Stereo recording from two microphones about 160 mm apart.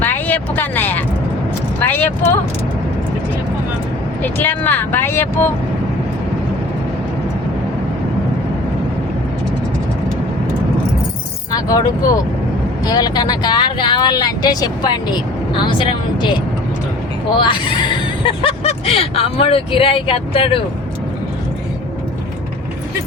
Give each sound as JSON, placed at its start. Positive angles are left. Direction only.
{"t": 0.0, "sound": "vehicle", "side_deg": 10}
{"t": 1.8, "sound": "speech", "side_deg": 10}
{"t": 4.2, "sound": "speech", "side_deg": 10}
{"t": 11.5, "sound": "speech", "side_deg": 20}
{"t": 17.4, "sound": "speech", "side_deg": 30}